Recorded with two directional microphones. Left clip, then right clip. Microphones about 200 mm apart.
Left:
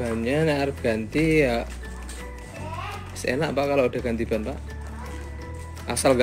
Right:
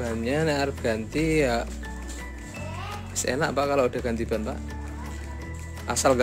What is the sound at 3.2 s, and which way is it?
Speech, 15° right (ahead or behind).